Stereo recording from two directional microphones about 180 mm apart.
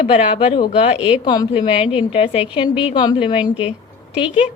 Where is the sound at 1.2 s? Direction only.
25° left (ahead or behind).